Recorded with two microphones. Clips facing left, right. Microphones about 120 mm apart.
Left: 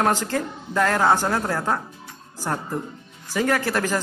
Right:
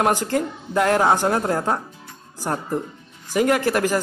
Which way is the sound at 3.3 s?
15° right (ahead or behind).